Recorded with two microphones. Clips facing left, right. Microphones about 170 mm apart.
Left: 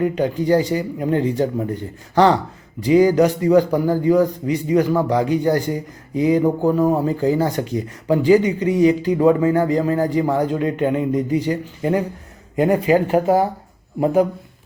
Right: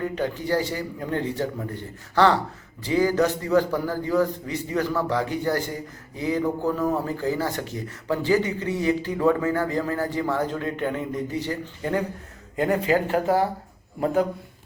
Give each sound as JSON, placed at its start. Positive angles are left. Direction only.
{"t": 0.0, "sound": "speech", "side_deg": 20}